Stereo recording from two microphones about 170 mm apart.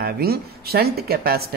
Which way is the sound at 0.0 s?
65° right (ahead or behind).